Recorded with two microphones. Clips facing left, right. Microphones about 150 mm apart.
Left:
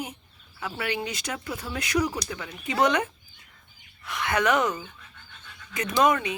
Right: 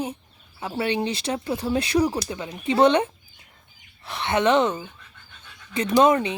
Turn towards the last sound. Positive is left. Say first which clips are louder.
# right 4 dB
turn(degrees=-25)  # may be behind; listen again after turning